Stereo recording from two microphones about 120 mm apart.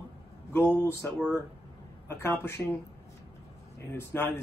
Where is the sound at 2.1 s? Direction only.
20° left (ahead or behind).